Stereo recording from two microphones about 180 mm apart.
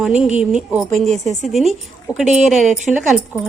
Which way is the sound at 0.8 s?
40° right (ahead or behind).